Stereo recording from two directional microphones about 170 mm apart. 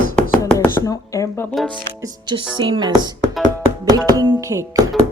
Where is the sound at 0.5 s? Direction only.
15° left (ahead or behind).